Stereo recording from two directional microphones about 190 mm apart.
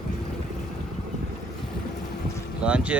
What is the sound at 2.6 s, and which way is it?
Boat, 5° right (ahead or behind).